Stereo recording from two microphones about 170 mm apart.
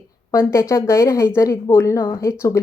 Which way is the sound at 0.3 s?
15° left (ahead or behind).